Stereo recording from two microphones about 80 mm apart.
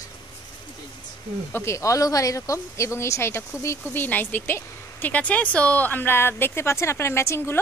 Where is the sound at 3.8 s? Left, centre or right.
Left.